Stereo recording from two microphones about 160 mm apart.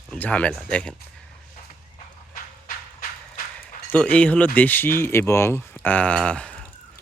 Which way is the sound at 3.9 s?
10° left (ahead or behind).